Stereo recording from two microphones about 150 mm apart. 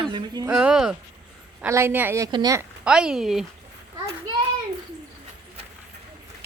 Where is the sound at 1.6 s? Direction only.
15° right (ahead or behind).